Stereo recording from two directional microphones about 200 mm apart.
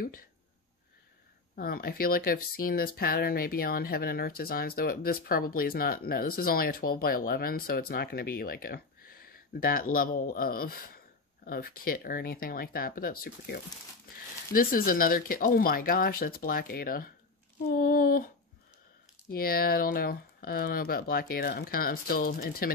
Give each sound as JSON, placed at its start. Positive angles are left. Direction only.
{"t": 1.5, "sound": "speech", "side_deg": 45}
{"t": 19.3, "sound": "speech", "side_deg": 50}